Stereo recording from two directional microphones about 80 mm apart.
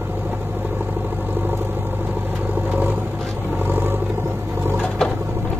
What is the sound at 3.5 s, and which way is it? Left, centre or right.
Vehicle, right.